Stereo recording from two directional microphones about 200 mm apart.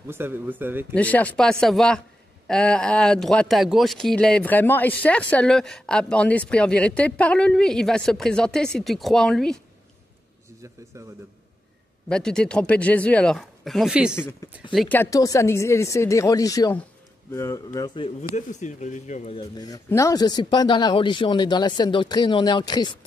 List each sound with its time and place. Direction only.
0.1 s speech: 10° right (ahead or behind)
0.9 s speech: 5° left (ahead or behind)
12.1 s speech: 5° left (ahead or behind); by 19.4 s 35° left (ahead or behind)
19.5 s speech: 20° left (ahead or behind)